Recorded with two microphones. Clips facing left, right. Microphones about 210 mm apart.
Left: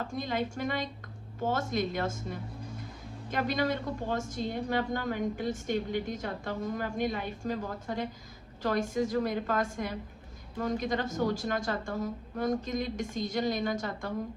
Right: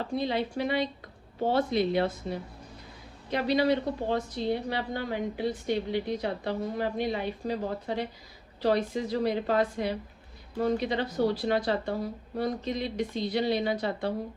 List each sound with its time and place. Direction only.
0.0 s a woman's voice: 45° left (ahead or behind)